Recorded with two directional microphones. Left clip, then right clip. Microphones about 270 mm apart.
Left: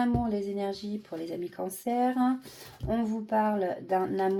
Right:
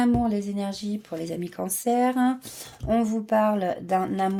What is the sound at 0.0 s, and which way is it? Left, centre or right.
Speech, right.